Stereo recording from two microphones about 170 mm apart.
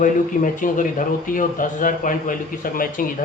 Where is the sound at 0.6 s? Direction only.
50° left (ahead or behind).